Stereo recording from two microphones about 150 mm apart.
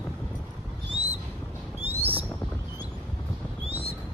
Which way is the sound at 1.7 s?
15° right (ahead or behind).